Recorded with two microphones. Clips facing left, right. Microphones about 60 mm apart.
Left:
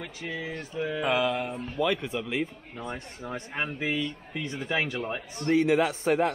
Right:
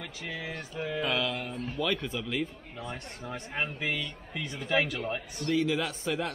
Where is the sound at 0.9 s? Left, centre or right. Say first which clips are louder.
Left 4 dB; centre.